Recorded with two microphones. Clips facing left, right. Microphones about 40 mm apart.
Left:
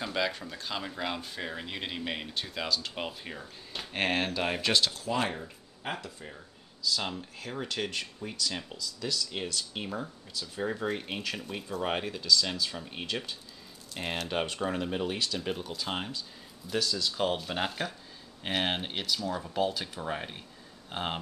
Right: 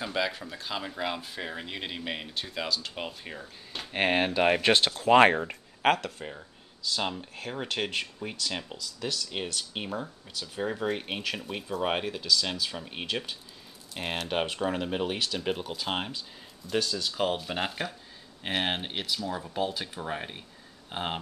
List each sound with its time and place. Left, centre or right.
0.0 s speech: centre
3.9 s speech: centre; by 5.3 s right
5.3 s speech: right
6.8 s speech: right
9.8 s speech: centre
11.0 s speech: right
11.3 s speech: centre
16.9 s speech: centre